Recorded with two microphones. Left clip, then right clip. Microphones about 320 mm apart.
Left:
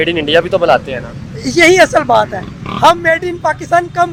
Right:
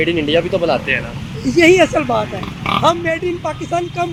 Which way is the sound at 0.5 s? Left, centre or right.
Left.